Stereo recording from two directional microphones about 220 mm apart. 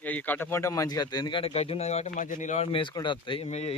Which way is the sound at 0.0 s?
5° left (ahead or behind).